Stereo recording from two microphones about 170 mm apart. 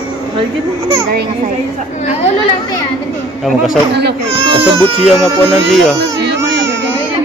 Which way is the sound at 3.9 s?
75° right (ahead or behind).